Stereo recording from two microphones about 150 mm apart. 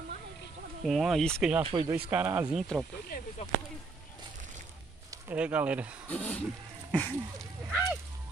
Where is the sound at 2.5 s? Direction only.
Centre (ahead or behind).